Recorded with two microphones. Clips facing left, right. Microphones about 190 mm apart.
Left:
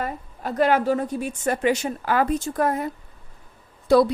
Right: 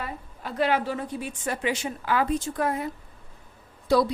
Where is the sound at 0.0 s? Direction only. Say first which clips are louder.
Left 6 dB; 45° left (ahead or behind).